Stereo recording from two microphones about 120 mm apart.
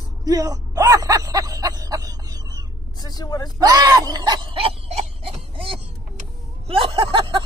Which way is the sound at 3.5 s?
30° right (ahead or behind).